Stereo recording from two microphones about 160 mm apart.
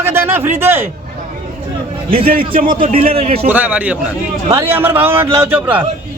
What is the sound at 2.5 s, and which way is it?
Speech, 60° right (ahead or behind).